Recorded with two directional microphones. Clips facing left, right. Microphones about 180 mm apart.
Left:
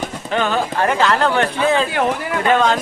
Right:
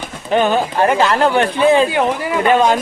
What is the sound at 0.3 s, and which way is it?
Speech, 15° right (ahead or behind).